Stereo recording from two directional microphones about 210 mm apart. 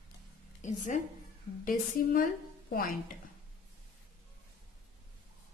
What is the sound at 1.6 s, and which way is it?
Speech, 45° left (ahead or behind).